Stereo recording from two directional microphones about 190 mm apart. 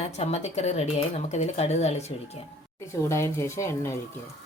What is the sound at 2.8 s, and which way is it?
Speech, 15° left (ahead or behind).